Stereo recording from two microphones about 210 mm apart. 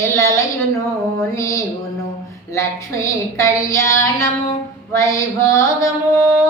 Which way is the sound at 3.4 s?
15° left (ahead or behind).